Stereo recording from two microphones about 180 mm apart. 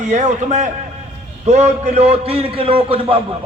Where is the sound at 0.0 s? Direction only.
40° right (ahead or behind).